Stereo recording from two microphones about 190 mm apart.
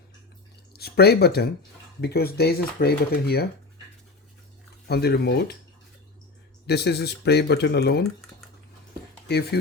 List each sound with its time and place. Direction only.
0.7 s speech: 55° left (ahead or behind)
4.9 s speech: 55° left (ahead or behind)
6.7 s speech: 60° left (ahead or behind)
9.2 s speech: 60° left (ahead or behind)